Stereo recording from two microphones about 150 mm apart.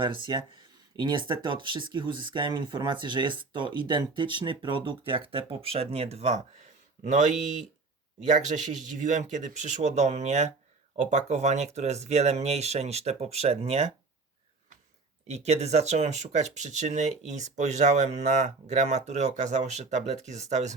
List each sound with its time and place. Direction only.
0.0 s speech: 35° right (ahead or behind)
15.3 s speech: 45° right (ahead or behind)